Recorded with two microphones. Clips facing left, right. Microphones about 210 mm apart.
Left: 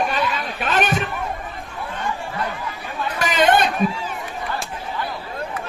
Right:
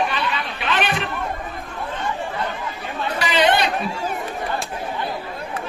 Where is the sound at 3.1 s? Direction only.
45° left (ahead or behind).